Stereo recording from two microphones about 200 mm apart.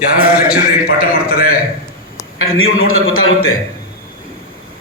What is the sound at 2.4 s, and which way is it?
A man's voice, 90° left.